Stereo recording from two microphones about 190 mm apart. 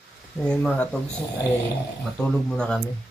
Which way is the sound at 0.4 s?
5° left (ahead or behind).